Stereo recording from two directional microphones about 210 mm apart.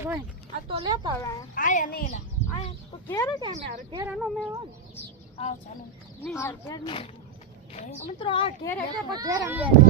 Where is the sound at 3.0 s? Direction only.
15° left (ahead or behind).